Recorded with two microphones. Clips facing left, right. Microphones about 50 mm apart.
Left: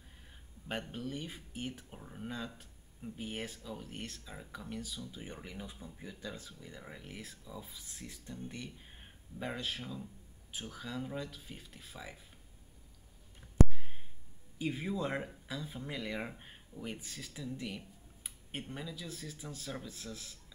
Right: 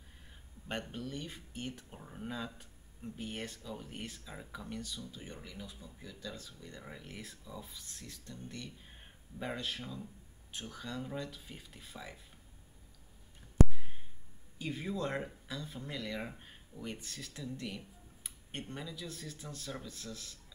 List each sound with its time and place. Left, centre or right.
0.7 s speech: centre
5.1 s speech: centre
14.6 s speech: centre